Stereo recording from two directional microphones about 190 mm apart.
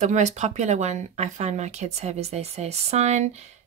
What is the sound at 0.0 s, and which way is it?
Speech, 40° right (ahead or behind).